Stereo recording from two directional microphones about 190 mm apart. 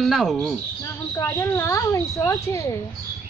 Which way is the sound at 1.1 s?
15° left (ahead or behind).